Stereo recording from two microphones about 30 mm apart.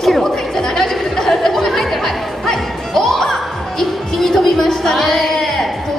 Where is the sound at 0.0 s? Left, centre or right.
Centre.